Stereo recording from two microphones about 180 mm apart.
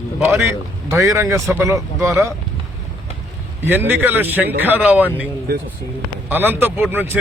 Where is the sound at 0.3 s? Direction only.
15° right (ahead or behind).